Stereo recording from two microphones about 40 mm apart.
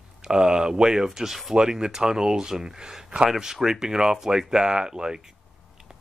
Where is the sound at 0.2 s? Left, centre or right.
Centre.